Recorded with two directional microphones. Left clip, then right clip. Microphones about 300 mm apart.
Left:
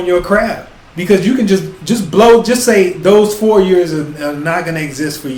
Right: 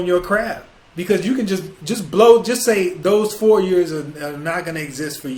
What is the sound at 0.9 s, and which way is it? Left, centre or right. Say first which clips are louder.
Speech: left 7 dB; right.